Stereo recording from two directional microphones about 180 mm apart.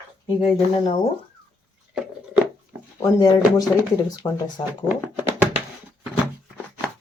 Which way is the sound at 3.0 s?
25° left (ahead or behind).